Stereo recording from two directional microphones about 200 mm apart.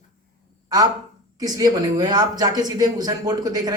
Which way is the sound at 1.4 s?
20° right (ahead or behind).